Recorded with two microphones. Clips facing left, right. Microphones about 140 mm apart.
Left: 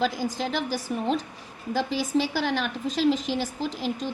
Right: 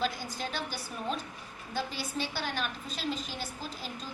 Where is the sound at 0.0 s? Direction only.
90° left.